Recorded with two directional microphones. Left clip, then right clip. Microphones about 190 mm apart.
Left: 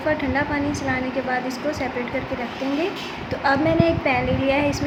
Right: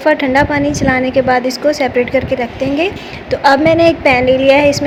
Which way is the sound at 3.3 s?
45° right (ahead or behind).